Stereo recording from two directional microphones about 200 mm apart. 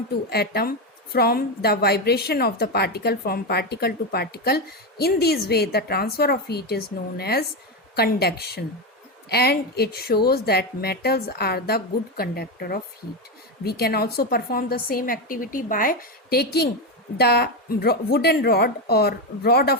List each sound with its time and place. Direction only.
0.3 s a woman's voice: 50° left (ahead or behind)